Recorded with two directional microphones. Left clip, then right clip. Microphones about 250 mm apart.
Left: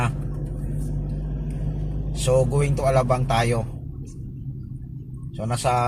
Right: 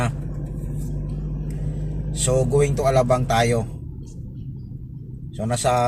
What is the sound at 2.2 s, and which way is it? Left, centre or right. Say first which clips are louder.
Speech: right 1 dB; centre.